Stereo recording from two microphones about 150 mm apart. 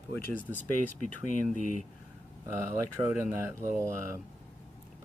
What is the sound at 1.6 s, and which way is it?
Speech, 60° left (ahead or behind).